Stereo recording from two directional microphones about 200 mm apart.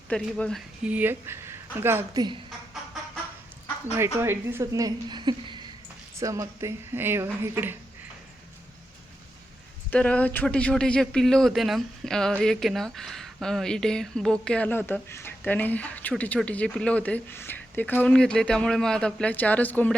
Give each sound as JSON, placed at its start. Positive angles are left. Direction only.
{"t": 0.1, "sound": "speech", "side_deg": 5}
{"t": 0.9, "sound": "a woman's voice", "side_deg": -10}
{"t": 3.9, "sound": "a woman's voice", "side_deg": -10}
{"t": 9.9, "sound": "speech", "side_deg": 5}